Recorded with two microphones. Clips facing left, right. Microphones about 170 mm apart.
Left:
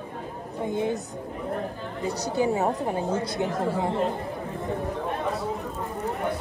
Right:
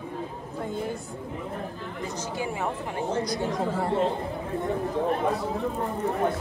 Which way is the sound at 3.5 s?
10° left (ahead or behind).